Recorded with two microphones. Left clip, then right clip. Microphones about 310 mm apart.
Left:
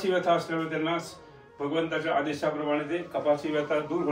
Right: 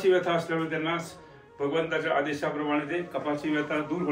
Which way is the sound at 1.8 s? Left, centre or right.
Left.